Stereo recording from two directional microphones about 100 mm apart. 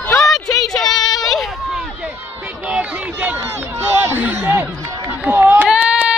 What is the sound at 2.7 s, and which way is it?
Speech, 10° right (ahead or behind).